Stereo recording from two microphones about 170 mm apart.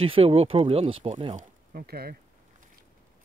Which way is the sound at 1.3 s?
55° right (ahead or behind).